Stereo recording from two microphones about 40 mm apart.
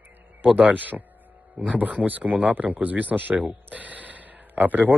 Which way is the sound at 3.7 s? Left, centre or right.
Right.